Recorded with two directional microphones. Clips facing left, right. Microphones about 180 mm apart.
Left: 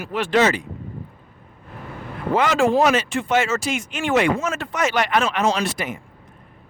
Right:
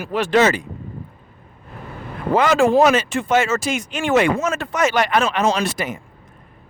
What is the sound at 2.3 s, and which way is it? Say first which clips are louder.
Speech: right 3 dB; 45° right (ahead or behind).